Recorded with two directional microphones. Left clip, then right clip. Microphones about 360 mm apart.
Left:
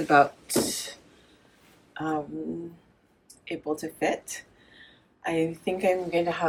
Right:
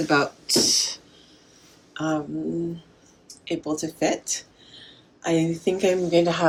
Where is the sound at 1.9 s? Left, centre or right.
Centre.